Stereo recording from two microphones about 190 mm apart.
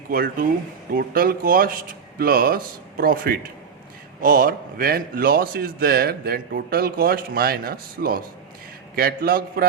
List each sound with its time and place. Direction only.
0.1 s a man's voice: 50° right (ahead or behind)